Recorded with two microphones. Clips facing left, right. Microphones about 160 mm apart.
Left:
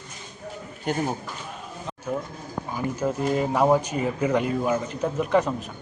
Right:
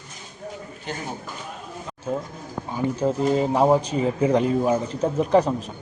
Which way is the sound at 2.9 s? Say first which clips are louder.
Right 3 dB; 30° right (ahead or behind).